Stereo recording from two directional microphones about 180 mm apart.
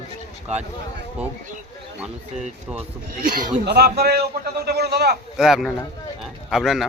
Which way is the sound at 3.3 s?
65° right (ahead or behind).